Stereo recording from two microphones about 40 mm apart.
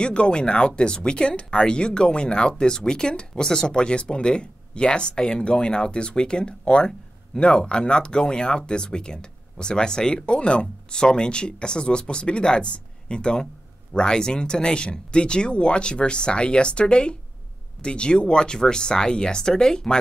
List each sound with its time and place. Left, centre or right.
0.0 s speech: left